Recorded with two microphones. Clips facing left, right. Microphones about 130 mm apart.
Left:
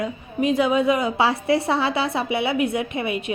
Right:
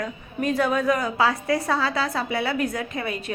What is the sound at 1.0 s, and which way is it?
A woman's voice, 30° left (ahead or behind).